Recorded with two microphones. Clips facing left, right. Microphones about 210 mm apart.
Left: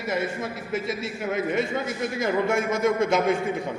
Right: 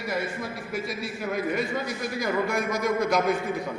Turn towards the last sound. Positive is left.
turn(degrees=25)  # may be behind; listen again after turning